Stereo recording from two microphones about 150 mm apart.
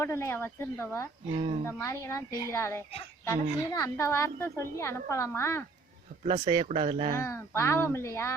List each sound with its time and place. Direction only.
0.0 s a woman's voice: 20° left (ahead or behind)
6.2 s speech: 40° right (ahead or behind)
7.2 s speech: 20° left (ahead or behind)